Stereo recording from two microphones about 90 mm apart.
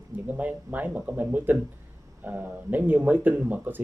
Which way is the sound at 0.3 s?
20° right (ahead or behind).